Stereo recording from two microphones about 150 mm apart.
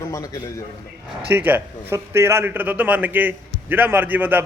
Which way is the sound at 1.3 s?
10° right (ahead or behind).